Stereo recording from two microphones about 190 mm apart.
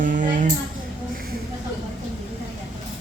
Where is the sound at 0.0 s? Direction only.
45° right (ahead or behind).